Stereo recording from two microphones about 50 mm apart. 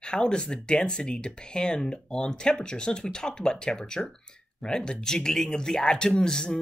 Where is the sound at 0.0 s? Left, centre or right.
Centre.